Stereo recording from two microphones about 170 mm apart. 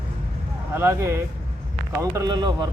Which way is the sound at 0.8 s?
15° right (ahead or behind).